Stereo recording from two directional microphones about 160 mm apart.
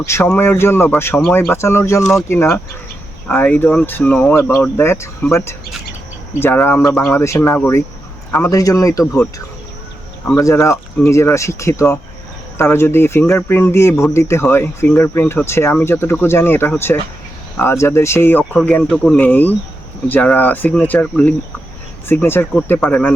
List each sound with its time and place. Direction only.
0.0 s speech: 15° left (ahead or behind)
6.4 s speech: 15° left (ahead or behind)
10.3 s speech: 20° left (ahead or behind)